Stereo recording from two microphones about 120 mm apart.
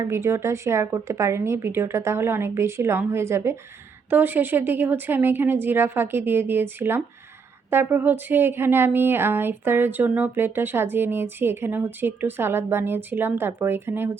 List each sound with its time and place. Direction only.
0.1 s a woman's voice: 20° right (ahead or behind)